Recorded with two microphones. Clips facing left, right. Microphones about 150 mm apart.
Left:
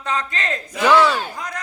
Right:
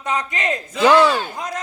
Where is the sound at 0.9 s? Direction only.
10° right (ahead or behind).